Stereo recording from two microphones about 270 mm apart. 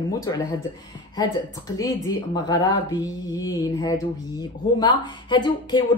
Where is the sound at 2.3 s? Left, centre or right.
Centre.